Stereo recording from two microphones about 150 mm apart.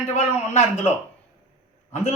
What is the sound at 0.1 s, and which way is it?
Speech, 50° left (ahead or behind).